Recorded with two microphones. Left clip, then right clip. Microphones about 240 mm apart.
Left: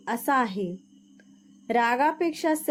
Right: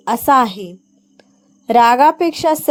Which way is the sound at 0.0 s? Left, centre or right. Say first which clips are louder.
Right 12 dB; right.